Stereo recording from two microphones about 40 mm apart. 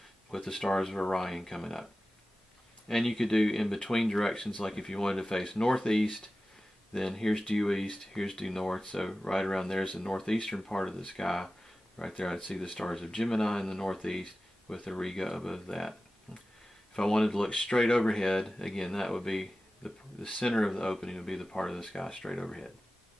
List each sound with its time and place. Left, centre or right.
0.3 s speech: centre
2.9 s speech: centre
17.5 s speech: left
17.7 s speech: centre